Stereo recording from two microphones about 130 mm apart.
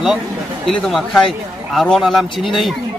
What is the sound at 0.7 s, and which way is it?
Speech, centre (ahead or behind).